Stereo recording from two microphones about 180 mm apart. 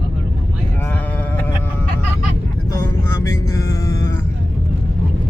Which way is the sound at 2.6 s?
15° left (ahead or behind).